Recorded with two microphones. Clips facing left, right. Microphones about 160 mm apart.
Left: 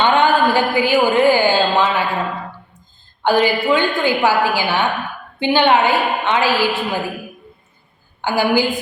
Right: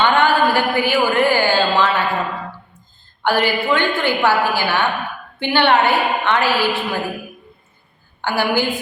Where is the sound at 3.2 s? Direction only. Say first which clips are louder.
Left 2 dB; 15° left (ahead or behind).